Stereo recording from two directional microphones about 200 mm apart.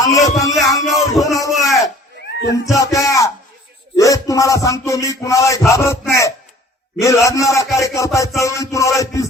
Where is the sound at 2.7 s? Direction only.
15° left (ahead or behind).